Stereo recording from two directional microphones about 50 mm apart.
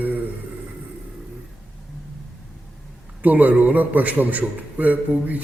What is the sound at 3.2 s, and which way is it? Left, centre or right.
A man's voice, right.